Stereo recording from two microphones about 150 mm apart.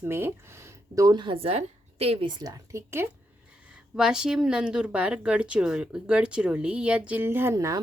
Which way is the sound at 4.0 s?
5° right (ahead or behind).